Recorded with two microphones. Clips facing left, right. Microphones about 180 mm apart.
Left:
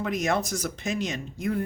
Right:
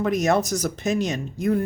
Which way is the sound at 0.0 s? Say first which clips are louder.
Right 6 dB; 40° right (ahead or behind).